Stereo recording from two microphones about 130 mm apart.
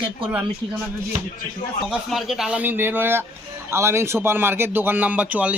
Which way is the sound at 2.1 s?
Centre (ahead or behind).